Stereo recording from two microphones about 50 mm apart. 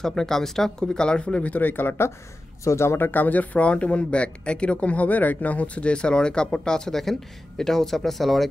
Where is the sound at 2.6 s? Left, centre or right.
Left.